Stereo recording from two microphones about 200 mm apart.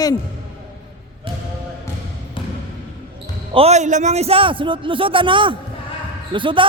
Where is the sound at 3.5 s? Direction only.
30° right (ahead or behind).